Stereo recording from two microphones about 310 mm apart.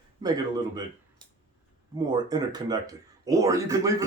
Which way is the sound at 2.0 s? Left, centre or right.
Centre.